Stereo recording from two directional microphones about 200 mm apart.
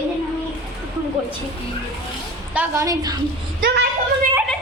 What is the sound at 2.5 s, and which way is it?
Speech, 15° right (ahead or behind).